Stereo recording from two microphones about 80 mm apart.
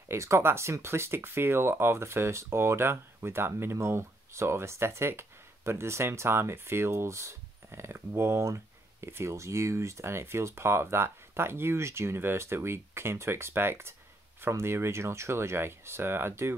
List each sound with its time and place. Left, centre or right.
0.1 s speech: right